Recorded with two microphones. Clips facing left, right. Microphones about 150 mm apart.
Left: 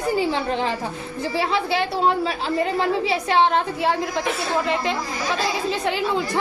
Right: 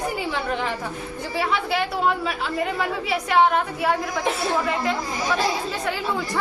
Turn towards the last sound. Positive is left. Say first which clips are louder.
# left 3 dB
turn(degrees=20)  # may be behind; listen again after turning